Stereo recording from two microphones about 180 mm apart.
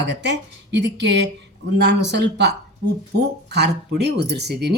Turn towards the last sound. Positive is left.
turn(degrees=-65)  # may be behind; listen again after turning